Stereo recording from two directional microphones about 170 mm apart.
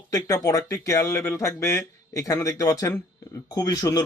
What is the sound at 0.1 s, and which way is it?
A man's voice, 20° left (ahead or behind).